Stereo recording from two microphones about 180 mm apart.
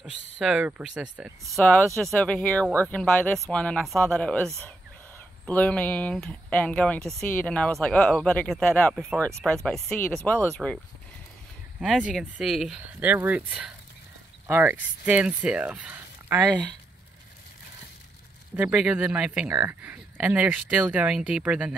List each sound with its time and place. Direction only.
0.4 s speech: 5° right (ahead or behind)
5.5 s speech: 10° left (ahead or behind)
11.8 s speech: centre (ahead or behind)
18.6 s speech: 5° right (ahead or behind)
19.5 s speech: 20° right (ahead or behind)
19.8 s speech: 10° right (ahead or behind)